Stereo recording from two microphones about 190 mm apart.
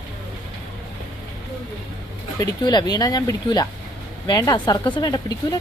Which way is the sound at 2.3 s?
20° left (ahead or behind).